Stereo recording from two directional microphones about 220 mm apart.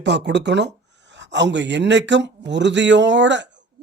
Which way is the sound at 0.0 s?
50° right (ahead or behind).